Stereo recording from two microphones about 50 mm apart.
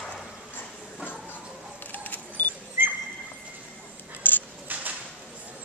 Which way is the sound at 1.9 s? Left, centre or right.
Left.